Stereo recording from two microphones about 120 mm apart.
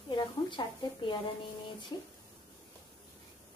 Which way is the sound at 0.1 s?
40° left (ahead or behind).